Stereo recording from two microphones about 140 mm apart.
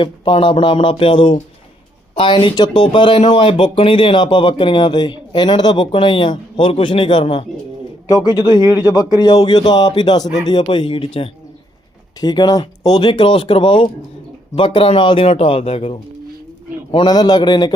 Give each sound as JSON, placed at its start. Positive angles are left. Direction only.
{"t": 0.0, "sound": "a man's voice", "side_deg": 35}
{"t": 16.9, "sound": "speech", "side_deg": 30}